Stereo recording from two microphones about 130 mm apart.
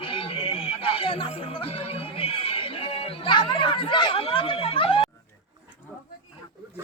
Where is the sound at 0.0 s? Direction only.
45° left (ahead or behind).